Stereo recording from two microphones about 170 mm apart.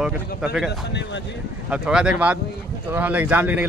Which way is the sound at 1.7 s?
5° right (ahead or behind).